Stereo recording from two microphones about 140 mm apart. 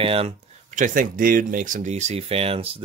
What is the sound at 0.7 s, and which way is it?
Speech, 70° right (ahead or behind).